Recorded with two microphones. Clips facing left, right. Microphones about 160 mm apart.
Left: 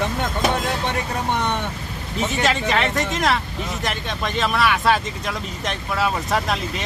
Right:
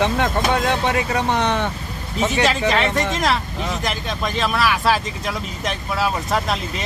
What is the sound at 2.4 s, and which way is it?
Speech, centre (ahead or behind).